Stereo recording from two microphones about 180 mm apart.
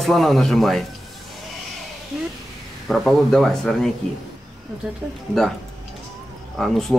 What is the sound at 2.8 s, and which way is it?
Speech, centre (ahead or behind).